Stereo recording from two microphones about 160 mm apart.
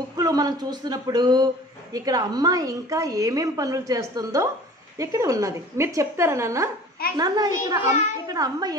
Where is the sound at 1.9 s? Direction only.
25° right (ahead or behind).